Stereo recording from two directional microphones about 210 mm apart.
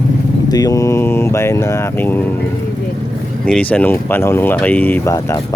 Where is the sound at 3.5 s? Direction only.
5° left (ahead or behind).